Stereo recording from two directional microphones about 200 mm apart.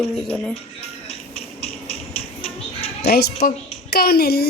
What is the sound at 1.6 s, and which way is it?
Music, 30° left (ahead or behind).